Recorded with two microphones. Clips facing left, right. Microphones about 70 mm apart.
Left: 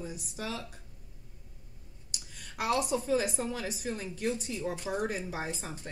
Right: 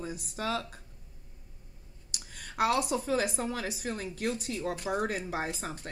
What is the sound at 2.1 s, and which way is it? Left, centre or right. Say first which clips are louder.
Speech: right 7 dB; right.